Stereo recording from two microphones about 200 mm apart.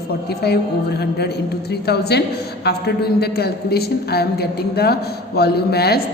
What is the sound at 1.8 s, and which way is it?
A woman's voice, 55° left (ahead or behind).